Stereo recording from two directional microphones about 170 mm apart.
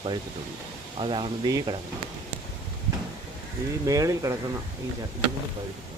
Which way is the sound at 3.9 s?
20° right (ahead or behind).